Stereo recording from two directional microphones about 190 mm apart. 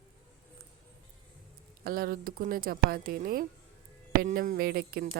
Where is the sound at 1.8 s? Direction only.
50° right (ahead or behind).